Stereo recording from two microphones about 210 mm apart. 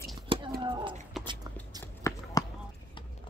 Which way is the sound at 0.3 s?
25° right (ahead or behind).